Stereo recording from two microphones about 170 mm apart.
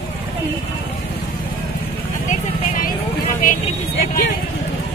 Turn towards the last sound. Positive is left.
turn(degrees=60)  # may be behind; listen again after turning